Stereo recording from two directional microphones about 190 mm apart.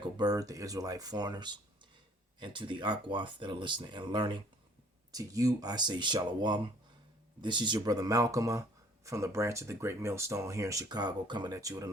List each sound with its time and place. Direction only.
0.0 s speech: 20° right (ahead or behind)